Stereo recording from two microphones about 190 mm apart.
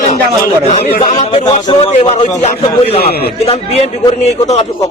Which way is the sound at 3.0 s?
55° left (ahead or behind).